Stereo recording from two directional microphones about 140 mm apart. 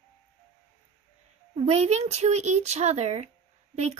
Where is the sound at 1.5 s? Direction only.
50° right (ahead or behind).